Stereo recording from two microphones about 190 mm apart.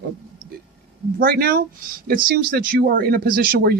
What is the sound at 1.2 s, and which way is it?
Speech, 50° right (ahead or behind).